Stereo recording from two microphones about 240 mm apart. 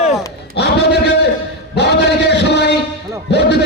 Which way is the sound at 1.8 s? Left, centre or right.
Left.